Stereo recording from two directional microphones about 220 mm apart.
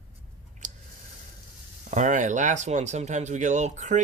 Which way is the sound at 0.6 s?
35° right (ahead or behind).